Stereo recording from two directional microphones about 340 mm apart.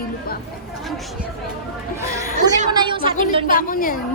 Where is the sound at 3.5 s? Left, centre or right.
Left.